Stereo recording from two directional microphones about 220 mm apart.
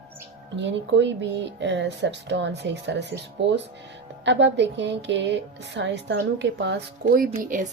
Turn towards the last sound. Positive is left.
turn(degrees=-35)  # may be behind; listen again after turning